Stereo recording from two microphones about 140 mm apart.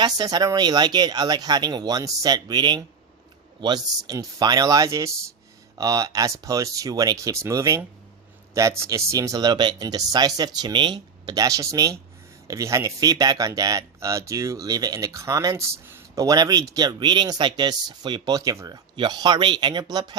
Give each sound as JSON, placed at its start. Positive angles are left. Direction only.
{"t": 0.0, "sound": "speech", "side_deg": -30}